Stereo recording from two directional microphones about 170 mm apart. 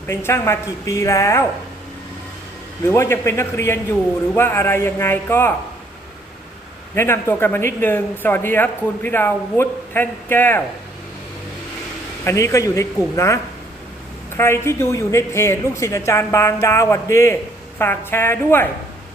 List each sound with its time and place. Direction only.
0.1 s speech: 15° left (ahead or behind)
2.8 s speech: 15° left (ahead or behind)
6.9 s speech: 15° left (ahead or behind)
12.2 s speech: 15° left (ahead or behind)